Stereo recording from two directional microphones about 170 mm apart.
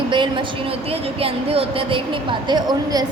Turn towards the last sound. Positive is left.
turn(degrees=-25)  # may be behind; listen again after turning